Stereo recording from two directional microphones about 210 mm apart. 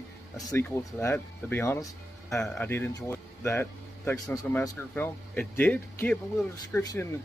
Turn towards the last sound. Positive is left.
turn(degrees=15)  # may be behind; listen again after turning